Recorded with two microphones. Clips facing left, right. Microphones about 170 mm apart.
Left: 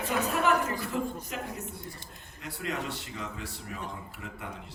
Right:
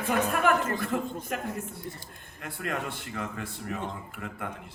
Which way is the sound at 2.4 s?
55° right (ahead or behind).